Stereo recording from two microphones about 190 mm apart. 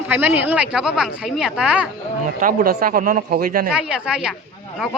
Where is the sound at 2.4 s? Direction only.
50° right (ahead or behind).